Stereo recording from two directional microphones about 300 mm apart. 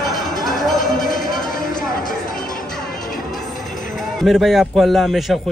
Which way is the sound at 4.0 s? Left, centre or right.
Centre.